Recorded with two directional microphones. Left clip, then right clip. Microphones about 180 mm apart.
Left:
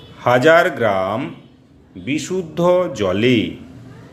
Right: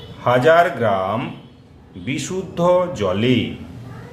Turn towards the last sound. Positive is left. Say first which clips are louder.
# left 2 dB
turn(degrees=35)  # may be behind; listen again after turning